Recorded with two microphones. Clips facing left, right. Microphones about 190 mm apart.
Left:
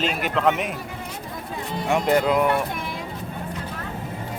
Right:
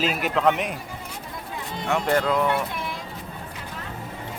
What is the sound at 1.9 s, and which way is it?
Speech, 15° left (ahead or behind).